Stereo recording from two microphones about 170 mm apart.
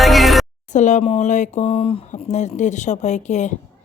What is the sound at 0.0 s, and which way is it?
Music, centre (ahead or behind).